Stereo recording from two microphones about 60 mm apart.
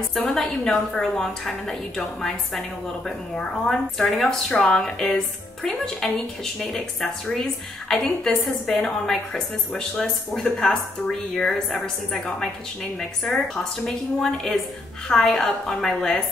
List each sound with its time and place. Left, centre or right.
0.3 s a woman's voice: centre
13.8 s a woman's voice: centre